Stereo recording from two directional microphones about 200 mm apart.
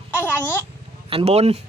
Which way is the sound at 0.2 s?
10° left (ahead or behind).